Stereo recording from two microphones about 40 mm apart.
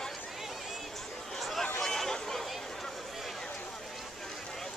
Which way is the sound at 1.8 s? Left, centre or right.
Centre.